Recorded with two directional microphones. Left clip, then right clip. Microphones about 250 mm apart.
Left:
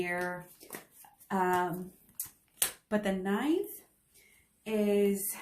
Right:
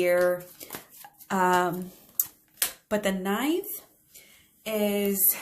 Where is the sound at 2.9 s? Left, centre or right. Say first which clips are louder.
Right 5 dB; right.